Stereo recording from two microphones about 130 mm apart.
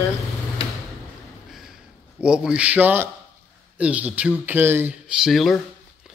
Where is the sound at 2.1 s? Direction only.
5° right (ahead or behind).